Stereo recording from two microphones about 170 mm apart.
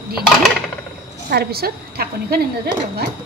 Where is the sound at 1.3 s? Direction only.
65° right (ahead or behind).